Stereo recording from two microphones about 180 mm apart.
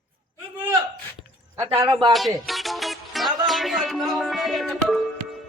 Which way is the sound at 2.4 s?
Centre (ahead or behind).